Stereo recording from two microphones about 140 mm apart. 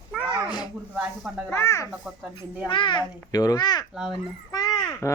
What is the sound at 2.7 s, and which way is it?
A child's voice, 35° left (ahead or behind).